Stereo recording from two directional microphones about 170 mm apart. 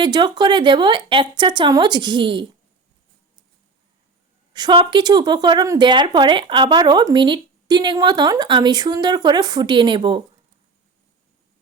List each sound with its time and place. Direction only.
0.0 s a woman's voice: 25° right (ahead or behind)
4.5 s a woman's voice: 25° right (ahead or behind)